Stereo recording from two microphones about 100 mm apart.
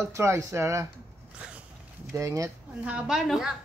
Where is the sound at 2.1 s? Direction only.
30° right (ahead or behind).